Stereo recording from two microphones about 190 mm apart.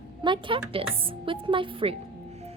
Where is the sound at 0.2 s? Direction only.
25° right (ahead or behind).